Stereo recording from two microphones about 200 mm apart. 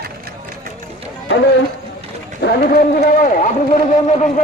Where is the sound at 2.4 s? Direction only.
55° left (ahead or behind).